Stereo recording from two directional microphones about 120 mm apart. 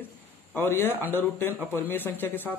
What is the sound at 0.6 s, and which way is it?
Speech, 20° left (ahead or behind).